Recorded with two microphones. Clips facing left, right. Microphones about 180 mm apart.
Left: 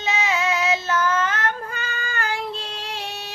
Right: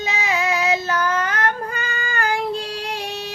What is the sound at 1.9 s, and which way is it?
Child singing, 55° right (ahead or behind).